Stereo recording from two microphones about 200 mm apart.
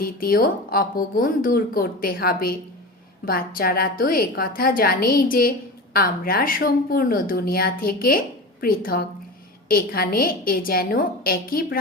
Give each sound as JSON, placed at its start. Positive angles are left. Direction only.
{"t": 0.0, "sound": "a woman's voice", "side_deg": 45}